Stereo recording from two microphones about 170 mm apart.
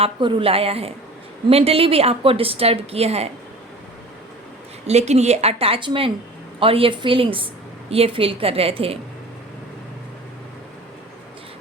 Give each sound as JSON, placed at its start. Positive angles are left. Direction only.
{"t": 0.0, "sound": "speech", "side_deg": -30}
{"t": 4.9, "sound": "speech", "side_deg": -40}